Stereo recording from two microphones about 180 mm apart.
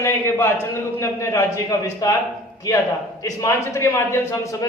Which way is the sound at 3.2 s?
20° left (ahead or behind).